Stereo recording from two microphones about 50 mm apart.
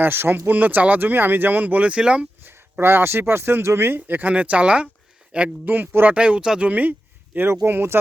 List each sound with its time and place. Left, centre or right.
0.0 s speech: right; by 2.2 s centre
2.4 s speech: right
4.3 s speech: right
5.6 s speech: right
6.1 s speech: right
7.3 s speech: right